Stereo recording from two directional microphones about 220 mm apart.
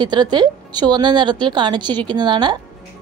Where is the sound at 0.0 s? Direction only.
20° right (ahead or behind).